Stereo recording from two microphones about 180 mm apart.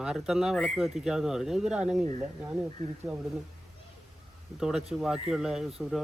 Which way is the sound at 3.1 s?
5° right (ahead or behind).